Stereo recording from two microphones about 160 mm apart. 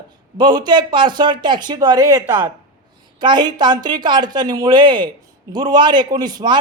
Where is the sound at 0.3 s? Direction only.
25° right (ahead or behind).